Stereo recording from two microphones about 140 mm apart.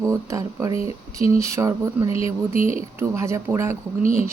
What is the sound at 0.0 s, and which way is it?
Speech, 20° right (ahead or behind).